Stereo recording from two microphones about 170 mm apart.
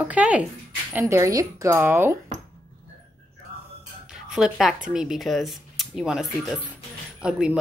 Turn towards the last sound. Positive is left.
turn(degrees=-5)  # may be behind; listen again after turning